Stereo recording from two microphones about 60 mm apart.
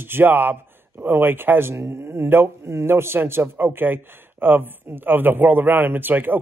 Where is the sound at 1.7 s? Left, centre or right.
Right.